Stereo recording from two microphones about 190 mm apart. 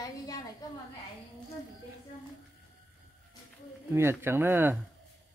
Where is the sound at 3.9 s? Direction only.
15° right (ahead or behind).